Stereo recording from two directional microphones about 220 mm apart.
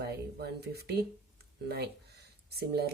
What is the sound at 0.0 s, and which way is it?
Speech, 45° right (ahead or behind).